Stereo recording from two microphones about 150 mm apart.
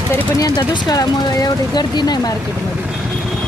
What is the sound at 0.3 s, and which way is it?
Speech, 30° left (ahead or behind).